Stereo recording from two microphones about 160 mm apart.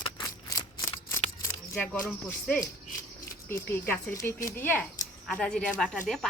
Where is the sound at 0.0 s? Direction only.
20° left (ahead or behind).